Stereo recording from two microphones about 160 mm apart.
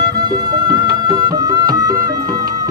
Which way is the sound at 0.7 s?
25° right (ahead or behind).